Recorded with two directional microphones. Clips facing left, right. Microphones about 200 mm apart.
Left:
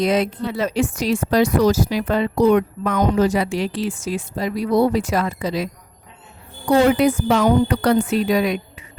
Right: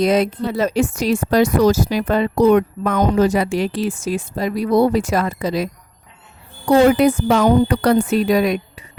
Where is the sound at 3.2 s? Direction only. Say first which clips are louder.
Right 2 dB; 50° right (ahead or behind).